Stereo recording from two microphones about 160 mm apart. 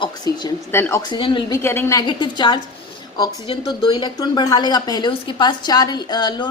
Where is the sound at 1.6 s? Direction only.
15° left (ahead or behind).